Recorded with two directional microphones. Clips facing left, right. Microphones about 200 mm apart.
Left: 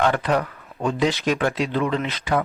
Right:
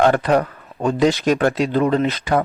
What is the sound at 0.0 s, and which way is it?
Speech, 40° right (ahead or behind).